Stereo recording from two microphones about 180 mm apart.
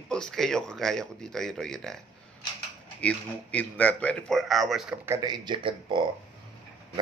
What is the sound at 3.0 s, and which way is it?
Speech, 10° left (ahead or behind).